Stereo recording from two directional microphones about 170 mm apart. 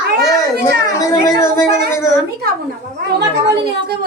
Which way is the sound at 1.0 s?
20° left (ahead or behind).